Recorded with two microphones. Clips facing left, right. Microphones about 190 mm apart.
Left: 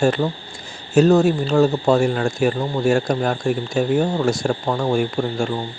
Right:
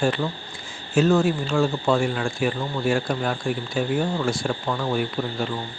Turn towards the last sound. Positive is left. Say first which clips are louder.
# left 5 dB
turn(degrees=45)  # may be behind; listen again after turning